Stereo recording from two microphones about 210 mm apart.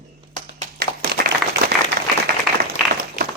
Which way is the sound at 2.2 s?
45° right (ahead or behind).